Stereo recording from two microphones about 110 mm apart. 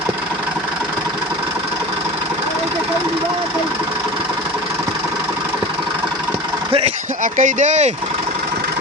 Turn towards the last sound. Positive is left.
turn(degrees=-90)